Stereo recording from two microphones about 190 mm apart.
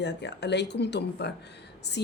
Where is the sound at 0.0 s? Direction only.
65° left (ahead or behind).